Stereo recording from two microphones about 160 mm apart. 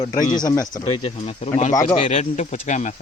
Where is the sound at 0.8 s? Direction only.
40° left (ahead or behind).